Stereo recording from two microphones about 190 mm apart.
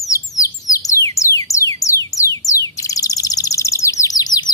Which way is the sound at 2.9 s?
20° left (ahead or behind).